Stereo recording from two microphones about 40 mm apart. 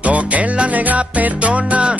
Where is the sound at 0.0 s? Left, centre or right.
Right.